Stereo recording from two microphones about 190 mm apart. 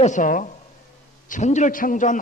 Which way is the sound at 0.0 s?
40° left (ahead or behind).